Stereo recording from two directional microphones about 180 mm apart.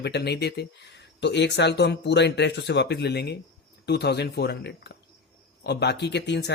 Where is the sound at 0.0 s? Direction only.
65° left (ahead or behind).